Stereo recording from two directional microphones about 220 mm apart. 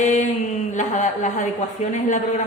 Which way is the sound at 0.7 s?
35° left (ahead or behind).